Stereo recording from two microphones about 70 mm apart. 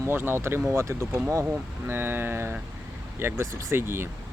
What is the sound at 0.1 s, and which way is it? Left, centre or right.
Speech, right.